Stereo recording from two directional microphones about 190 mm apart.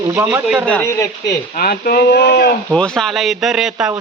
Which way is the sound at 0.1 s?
10° right (ahead or behind).